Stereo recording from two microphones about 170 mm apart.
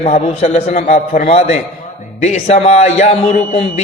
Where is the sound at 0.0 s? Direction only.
40° left (ahead or behind).